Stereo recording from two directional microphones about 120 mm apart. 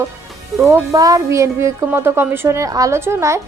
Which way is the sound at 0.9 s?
30° right (ahead or behind).